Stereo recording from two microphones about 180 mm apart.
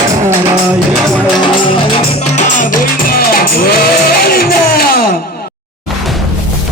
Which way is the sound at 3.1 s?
55° left (ahead or behind).